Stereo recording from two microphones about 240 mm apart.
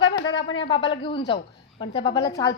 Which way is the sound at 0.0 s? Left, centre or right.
Left.